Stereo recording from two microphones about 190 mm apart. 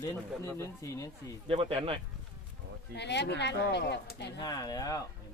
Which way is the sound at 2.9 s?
65° left (ahead or behind).